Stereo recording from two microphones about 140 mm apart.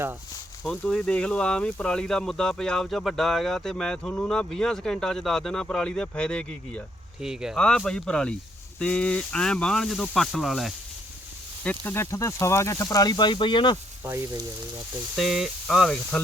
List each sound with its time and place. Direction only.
0.6 s speech: 5° left (ahead or behind)
7.2 s speech: 5° right (ahead or behind)
11.6 s speech: 10° left (ahead or behind); by 13.7 s 35° left (ahead or behind)
14.0 s frying: 20° right (ahead or behind)
15.1 s speech: centre (ahead or behind)